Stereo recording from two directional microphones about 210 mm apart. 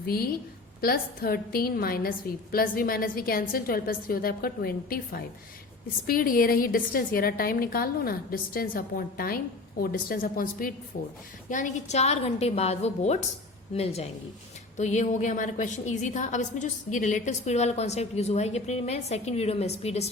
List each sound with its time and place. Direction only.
0.8 s a woman's voice: 45° left (ahead or behind); by 20.1 s 30° left (ahead or behind)